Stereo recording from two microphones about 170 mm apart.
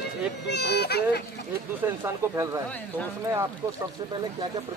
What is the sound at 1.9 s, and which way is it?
Speech, 15° right (ahead or behind).